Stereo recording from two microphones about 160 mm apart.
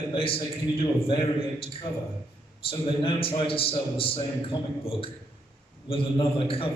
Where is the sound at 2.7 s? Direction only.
35° left (ahead or behind).